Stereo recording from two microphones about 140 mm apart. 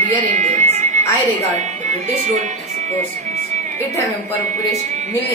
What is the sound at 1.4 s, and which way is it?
Speech, 55° right (ahead or behind).